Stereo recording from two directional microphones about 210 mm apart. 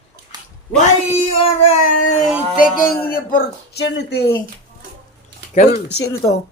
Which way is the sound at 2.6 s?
40° left (ahead or behind).